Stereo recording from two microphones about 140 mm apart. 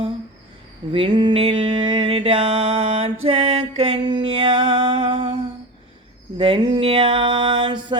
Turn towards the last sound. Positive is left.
turn(degrees=-35)  # may be behind; listen again after turning